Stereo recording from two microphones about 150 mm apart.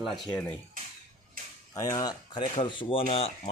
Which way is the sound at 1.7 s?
20° left (ahead or behind).